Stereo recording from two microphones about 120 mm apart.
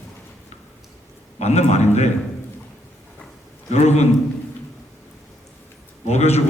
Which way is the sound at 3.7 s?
65° left (ahead or behind).